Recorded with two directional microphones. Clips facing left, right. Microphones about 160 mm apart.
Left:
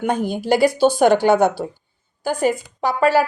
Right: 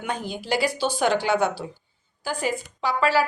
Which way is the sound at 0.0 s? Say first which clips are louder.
Left 9 dB; 50° left (ahead or behind).